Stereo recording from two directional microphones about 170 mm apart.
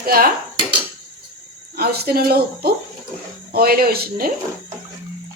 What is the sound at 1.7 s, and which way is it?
Speech, 65° right (ahead or behind).